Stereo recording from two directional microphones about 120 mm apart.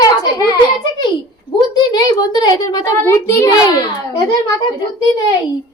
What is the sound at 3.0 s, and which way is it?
Speech, 25° left (ahead or behind).